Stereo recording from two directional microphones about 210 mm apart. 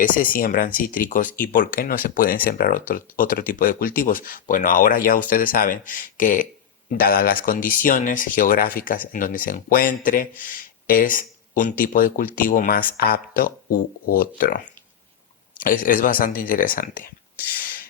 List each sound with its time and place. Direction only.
0.0 s speech: 40° left (ahead or behind)